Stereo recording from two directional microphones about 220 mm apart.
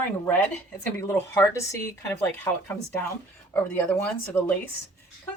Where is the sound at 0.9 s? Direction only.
10° left (ahead or behind).